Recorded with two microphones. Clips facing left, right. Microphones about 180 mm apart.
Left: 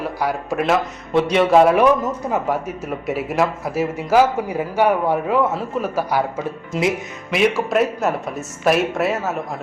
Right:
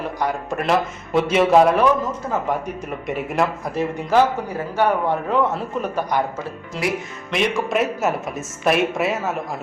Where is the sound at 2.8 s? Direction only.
5° left (ahead or behind).